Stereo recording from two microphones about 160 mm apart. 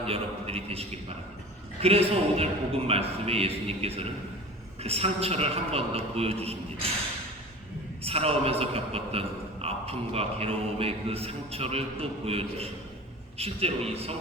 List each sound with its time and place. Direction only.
0.0 s a man's voice: 40° right (ahead or behind)
8.0 s a man's voice: 40° right (ahead or behind)